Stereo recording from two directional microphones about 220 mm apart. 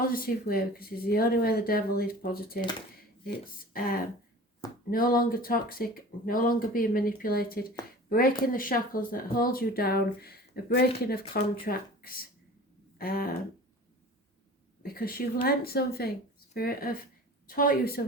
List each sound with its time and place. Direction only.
0.0 s speech: 40° left (ahead or behind)
14.8 s a woman's voice: 40° left (ahead or behind)